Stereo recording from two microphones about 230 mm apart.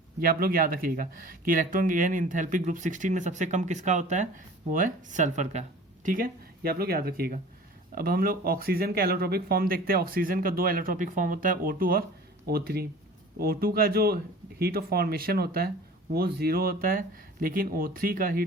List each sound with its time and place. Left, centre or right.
0.2 s speech: right